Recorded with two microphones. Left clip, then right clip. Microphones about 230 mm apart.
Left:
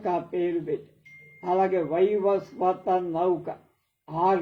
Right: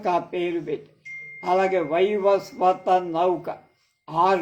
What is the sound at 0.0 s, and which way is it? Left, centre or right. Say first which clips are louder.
A man's voice: right 3 dB; right.